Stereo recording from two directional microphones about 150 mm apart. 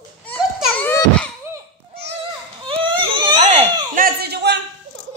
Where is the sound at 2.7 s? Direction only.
35° right (ahead or behind).